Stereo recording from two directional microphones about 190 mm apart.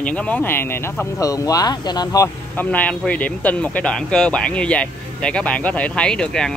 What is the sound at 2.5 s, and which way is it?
Speech, 10° left (ahead or behind).